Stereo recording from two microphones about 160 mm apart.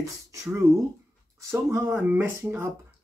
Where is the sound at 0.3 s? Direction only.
15° right (ahead or behind).